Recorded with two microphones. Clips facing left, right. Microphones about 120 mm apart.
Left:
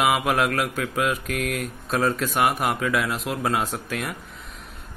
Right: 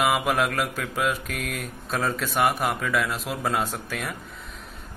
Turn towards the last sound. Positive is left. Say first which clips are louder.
# left 2 dB
turn(degrees=0)  # may be behind; listen again after turning